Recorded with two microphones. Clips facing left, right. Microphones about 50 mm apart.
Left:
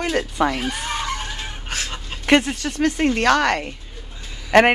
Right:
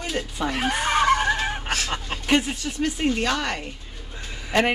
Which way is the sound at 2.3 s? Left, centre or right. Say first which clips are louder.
Left 5 dB; left.